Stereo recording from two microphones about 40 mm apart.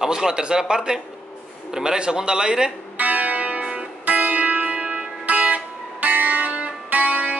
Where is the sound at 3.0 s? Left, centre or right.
Right.